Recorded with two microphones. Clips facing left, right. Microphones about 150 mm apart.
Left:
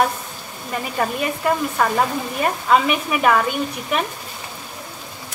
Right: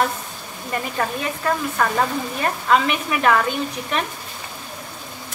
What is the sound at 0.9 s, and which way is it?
Sizzle, 10° left (ahead or behind).